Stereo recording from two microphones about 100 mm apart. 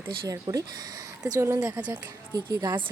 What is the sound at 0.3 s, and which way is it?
Speech, 35° right (ahead or behind).